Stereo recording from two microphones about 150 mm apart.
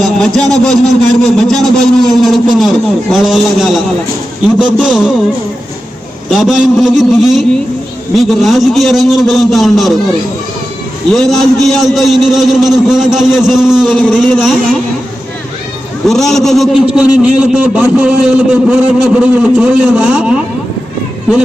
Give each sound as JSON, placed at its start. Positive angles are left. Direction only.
{"t": 0.0, "sound": "speech", "side_deg": 0}
{"t": 6.3, "sound": "speech", "side_deg": 0}
{"t": 11.1, "sound": "speech", "side_deg": 0}
{"t": 16.0, "sound": "a man's voice", "side_deg": 0}